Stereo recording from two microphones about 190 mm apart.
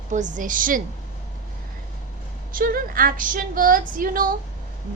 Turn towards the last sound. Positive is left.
turn(degrees=-45)  # may be behind; listen again after turning